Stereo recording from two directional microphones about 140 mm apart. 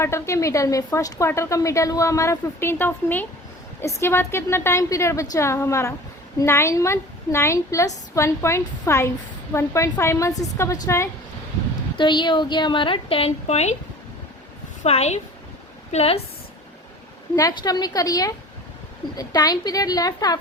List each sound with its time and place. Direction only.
0.0 s a woman's voice: 20° left (ahead or behind)
11.9 s a woman's voice: 35° left (ahead or behind); by 13.7 s 50° left (ahead or behind)
14.8 s a woman's voice: 50° left (ahead or behind)
17.3 s a woman's voice: 25° left (ahead or behind)